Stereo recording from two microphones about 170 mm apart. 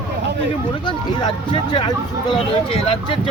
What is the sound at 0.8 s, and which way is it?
Speech, 30° left (ahead or behind).